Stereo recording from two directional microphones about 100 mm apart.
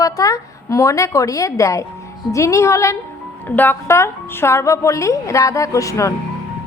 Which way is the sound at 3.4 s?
20° left (ahead or behind).